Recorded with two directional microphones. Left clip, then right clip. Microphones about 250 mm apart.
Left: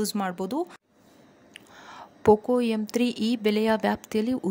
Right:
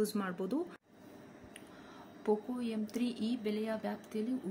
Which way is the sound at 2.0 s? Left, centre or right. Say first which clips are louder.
Left 14 dB; left.